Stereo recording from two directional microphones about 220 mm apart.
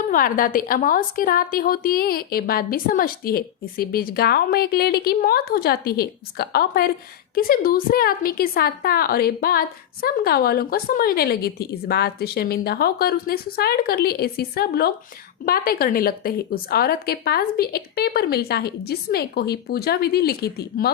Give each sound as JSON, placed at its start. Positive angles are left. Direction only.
{"t": 0.1, "sound": "a woman's voice", "side_deg": 40}